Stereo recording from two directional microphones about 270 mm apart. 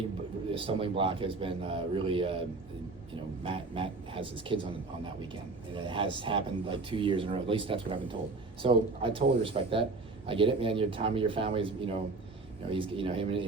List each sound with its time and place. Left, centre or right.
0.5 s speech: centre
3.4 s speech: centre